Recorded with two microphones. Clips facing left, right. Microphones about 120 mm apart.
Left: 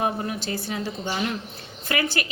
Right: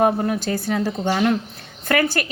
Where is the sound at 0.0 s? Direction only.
45° right (ahead or behind).